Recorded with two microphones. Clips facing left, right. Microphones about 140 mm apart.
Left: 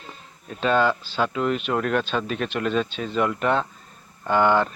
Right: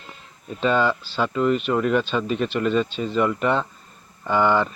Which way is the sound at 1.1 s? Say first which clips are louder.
Right 2 dB; 5° left (ahead or behind).